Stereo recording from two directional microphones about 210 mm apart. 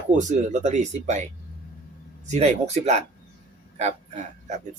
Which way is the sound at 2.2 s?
30° right (ahead or behind).